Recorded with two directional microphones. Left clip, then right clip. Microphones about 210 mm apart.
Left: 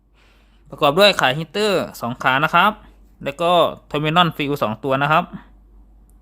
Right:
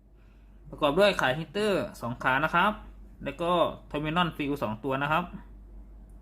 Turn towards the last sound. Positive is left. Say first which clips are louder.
# left 11 dB
turn(degrees=50)  # may be behind; listen again after turning